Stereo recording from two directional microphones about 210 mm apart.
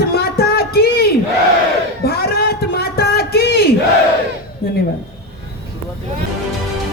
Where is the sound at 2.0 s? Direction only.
45° left (ahead or behind).